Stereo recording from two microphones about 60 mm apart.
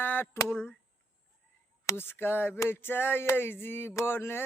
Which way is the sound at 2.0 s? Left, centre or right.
Left.